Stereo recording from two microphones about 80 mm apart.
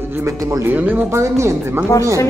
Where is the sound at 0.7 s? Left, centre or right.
Right.